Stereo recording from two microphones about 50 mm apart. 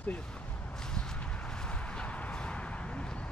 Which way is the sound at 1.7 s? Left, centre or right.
Left.